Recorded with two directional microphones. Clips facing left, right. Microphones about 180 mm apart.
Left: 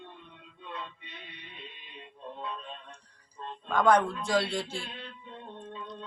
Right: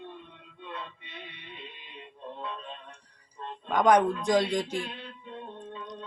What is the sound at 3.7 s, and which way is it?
A man's voice, 15° right (ahead or behind).